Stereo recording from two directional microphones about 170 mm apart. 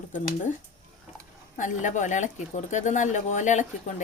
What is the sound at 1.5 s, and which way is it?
Speech, 45° left (ahead or behind).